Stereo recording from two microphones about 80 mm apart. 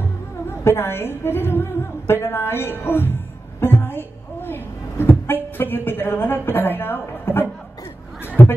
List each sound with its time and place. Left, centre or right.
0.0 s a woman's voice: left